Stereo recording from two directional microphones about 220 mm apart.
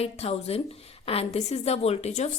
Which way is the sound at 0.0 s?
25° left (ahead or behind).